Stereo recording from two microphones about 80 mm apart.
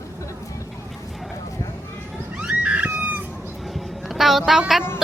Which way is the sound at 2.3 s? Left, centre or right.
Centre.